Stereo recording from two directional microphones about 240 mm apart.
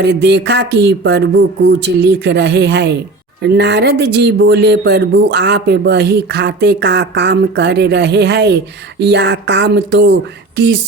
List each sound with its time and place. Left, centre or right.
0.0 s speech: right